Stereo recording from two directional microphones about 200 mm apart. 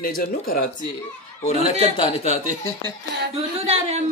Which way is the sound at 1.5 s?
30° left (ahead or behind).